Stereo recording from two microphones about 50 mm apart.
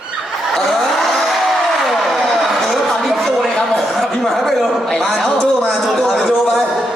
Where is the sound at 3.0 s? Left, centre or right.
Centre.